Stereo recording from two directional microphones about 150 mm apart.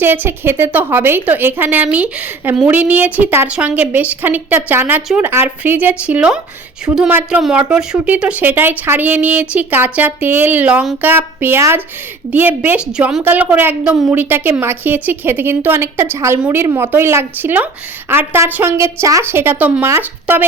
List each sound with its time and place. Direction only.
0.0 s a woman's voice: 15° right (ahead or behind)